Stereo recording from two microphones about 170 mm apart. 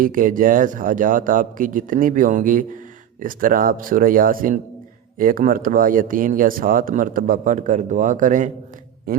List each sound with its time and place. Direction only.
0.0 s speech: 55° right (ahead or behind)
9.1 s speech: 60° right (ahead or behind)